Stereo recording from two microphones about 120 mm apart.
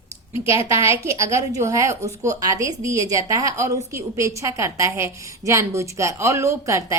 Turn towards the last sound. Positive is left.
turn(degrees=-25)  # may be behind; listen again after turning